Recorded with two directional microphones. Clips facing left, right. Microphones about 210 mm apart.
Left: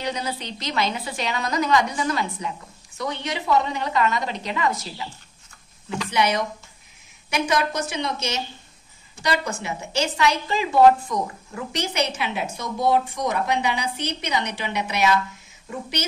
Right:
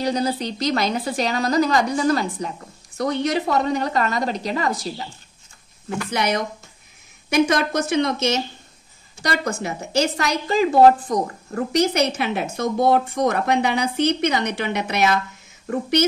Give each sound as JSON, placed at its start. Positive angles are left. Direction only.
{"t": 0.0, "sound": "a woman's voice", "side_deg": -35}
{"t": 6.1, "sound": "a woman's voice", "side_deg": -45}